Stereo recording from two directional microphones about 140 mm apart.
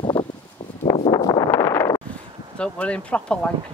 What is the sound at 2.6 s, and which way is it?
Speech, 10° left (ahead or behind).